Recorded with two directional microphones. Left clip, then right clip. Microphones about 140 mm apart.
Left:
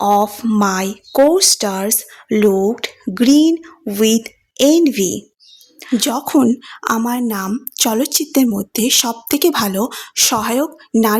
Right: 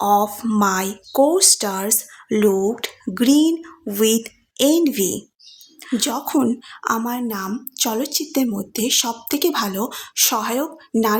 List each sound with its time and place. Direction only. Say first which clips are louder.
0.0 s a woman's voice: left 3 dB; 35° left (ahead or behind)